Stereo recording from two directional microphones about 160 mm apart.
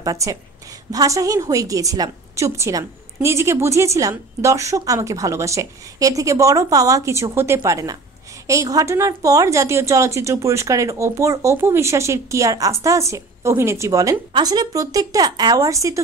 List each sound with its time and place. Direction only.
0.0 s a woman's voice: 20° right (ahead or behind)